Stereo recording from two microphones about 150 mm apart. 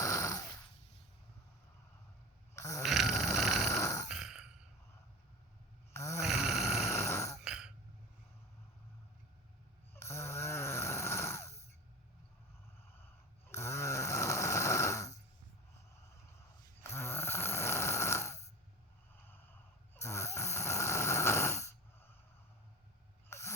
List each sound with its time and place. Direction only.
0.0 s a sound: 20° left (ahead or behind)
2.6 s snoring: 20° left (ahead or behind)
2.8 s a sound: centre (ahead or behind)
3.7 s grunt: 20° left (ahead or behind)
4.1 s a sound: 5° right (ahead or behind)
5.9 s snoring: 20° left (ahead or behind)
6.2 s snoring: 5° right (ahead or behind)
6.9 s grunt: 20° left (ahead or behind)
7.4 s throat clearing: 5° right (ahead or behind)
9.9 s snoring: 20° left (ahead or behind)
13.5 s snoring: 20° left (ahead or behind)
16.8 s snoring: 15° left (ahead or behind)
20.0 s snoring: 20° left (ahead or behind)
23.3 s ratchet: 20° left (ahead or behind)